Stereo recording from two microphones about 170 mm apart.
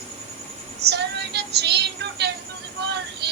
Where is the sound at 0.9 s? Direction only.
75° right (ahead or behind).